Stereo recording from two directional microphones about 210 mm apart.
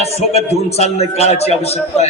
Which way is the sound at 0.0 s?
30° left (ahead or behind).